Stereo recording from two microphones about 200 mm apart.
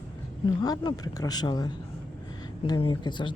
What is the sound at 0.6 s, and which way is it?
Speech, 20° left (ahead or behind).